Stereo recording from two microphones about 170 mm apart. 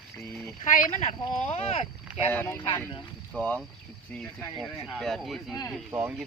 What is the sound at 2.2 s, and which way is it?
A man's voice, 10° left (ahead or behind).